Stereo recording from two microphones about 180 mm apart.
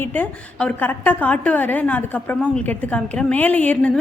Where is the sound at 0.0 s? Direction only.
10° left (ahead or behind).